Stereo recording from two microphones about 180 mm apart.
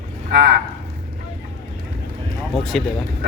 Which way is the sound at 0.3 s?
60° right (ahead or behind).